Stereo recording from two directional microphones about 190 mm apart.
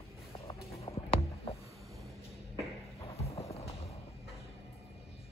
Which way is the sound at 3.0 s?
30° left (ahead or behind).